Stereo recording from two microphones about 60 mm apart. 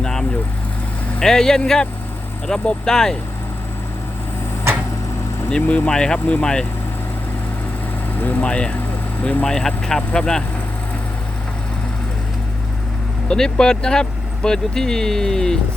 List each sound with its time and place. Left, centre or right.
0.0 s vehicle: centre
1.2 s speech: centre
5.5 s speech: centre
8.2 s speech: left
8.4 s speech: centre
9.5 s speech: centre
13.2 s speech: centre